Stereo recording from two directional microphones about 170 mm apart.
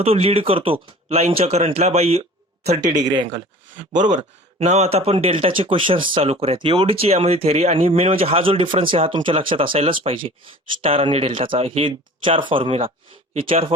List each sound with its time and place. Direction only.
0.0 s speech: 35° right (ahead or behind)
2.9 s speech: 25° right (ahead or behind)
3.9 s speech: 45° right (ahead or behind)